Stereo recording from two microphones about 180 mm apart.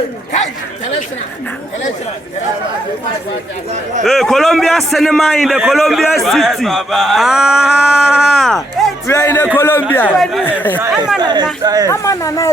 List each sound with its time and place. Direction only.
4.0 s a man's voice: centre (ahead or behind)
9.0 s speech: 15° left (ahead or behind)
10.8 s speech: 10° right (ahead or behind)
11.2 s speech: 25° right (ahead or behind)
11.9 s speech: 15° left (ahead or behind)